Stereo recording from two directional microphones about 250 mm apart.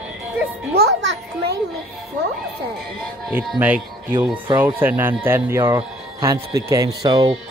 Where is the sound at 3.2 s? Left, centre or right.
Centre.